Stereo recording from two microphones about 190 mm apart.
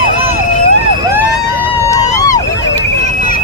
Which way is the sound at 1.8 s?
15° left (ahead or behind).